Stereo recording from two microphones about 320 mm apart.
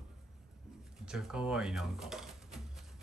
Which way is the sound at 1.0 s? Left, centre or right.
Centre.